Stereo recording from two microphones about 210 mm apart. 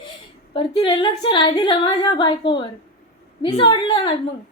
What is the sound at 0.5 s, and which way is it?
A woman's voice, 20° left (ahead or behind).